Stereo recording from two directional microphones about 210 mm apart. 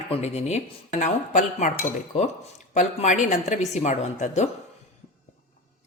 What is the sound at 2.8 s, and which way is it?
A woman's voice, 35° left (ahead or behind).